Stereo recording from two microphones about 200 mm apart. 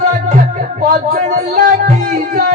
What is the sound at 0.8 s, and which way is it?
Music, 40° right (ahead or behind).